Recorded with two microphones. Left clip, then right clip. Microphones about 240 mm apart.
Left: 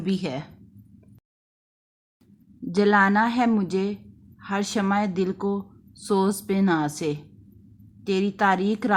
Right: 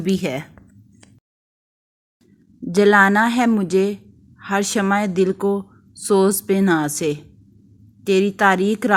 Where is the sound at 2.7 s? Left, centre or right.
Centre.